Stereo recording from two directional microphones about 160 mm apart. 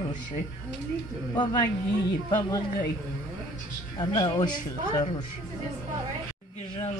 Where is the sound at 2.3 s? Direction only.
25° left (ahead or behind).